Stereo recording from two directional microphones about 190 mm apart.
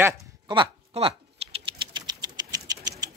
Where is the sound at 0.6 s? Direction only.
30° right (ahead or behind).